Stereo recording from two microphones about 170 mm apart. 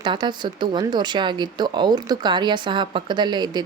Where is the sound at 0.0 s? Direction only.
25° right (ahead or behind).